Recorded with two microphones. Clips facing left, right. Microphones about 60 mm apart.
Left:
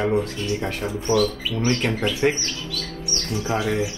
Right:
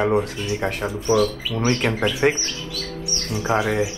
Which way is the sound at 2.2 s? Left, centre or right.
Right.